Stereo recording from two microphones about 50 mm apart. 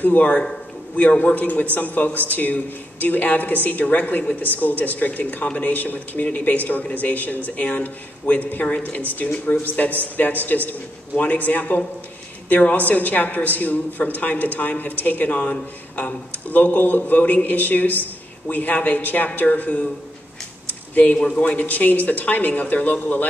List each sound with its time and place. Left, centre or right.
0.0 s a man's voice: left
8.6 s a man's voice: left
8.9 s a woman's voice: left
20.6 s a sound: left
21.2 s a man's voice: left
21.5 s a woman's voice: left